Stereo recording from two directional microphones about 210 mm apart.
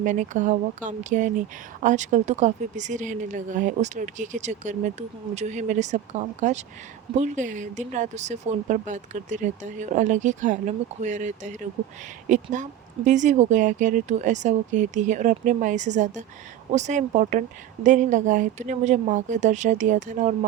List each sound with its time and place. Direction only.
0.0 s speech: 35° right (ahead or behind)